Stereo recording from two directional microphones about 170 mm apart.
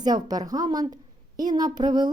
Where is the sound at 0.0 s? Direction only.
25° right (ahead or behind).